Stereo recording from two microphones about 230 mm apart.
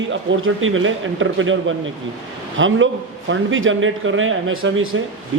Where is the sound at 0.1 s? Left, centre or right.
Right.